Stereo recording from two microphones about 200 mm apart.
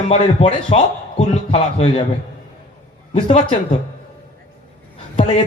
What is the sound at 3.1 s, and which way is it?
Speech, 25° left (ahead or behind).